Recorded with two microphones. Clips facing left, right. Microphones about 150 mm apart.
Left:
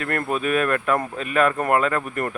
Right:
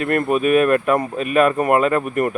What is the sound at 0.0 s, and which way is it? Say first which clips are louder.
Speech: right 6 dB; 20° right (ahead or behind).